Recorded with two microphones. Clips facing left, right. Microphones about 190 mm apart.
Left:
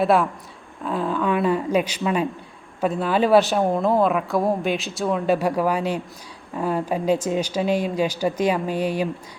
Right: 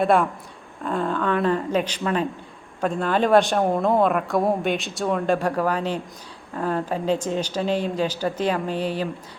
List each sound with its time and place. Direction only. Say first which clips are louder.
0.0 s speech: even; centre (ahead or behind)